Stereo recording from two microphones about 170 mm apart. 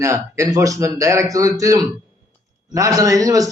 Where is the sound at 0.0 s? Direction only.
15° right (ahead or behind).